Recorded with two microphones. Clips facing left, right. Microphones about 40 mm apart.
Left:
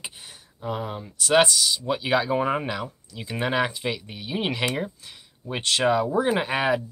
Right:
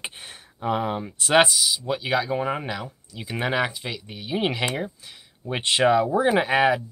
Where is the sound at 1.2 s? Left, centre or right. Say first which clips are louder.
Right 1 dB; centre.